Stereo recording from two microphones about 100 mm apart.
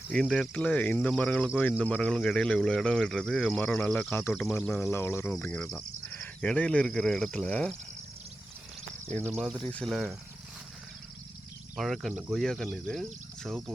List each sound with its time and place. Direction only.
0.1 s speech: 10° left (ahead or behind)
4.7 s speech: 25° left (ahead or behind)
5.5 s speech: 10° left (ahead or behind)
9.4 s speech: 5° left (ahead or behind)
9.9 s speech: 5° right (ahead or behind)
11.8 s speech: centre (ahead or behind)